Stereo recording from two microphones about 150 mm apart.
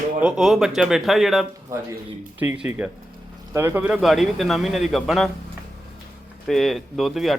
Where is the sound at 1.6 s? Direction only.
20° right (ahead or behind); by 5.3 s centre (ahead or behind).